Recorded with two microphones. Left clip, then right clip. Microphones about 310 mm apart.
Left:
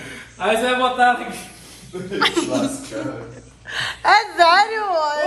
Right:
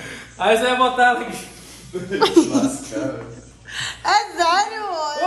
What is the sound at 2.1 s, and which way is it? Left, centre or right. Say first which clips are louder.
Speech: right 3 dB; centre.